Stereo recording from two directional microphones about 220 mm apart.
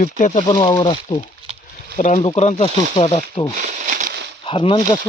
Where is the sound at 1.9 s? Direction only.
35° left (ahead or behind).